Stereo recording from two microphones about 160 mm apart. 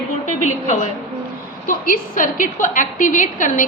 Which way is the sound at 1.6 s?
60° left (ahead or behind).